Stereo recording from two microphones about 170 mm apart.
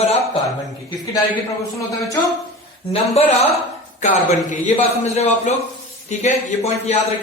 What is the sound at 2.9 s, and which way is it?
Speech, 35° left (ahead or behind).